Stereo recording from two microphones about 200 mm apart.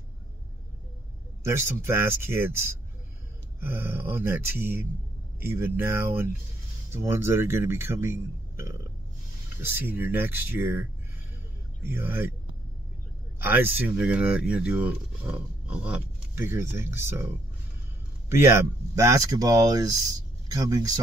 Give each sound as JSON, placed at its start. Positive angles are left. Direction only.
{"t": 1.4, "sound": "speech", "side_deg": -10}
{"t": 13.4, "sound": "speech", "side_deg": -10}
{"t": 18.3, "sound": "speech", "side_deg": -10}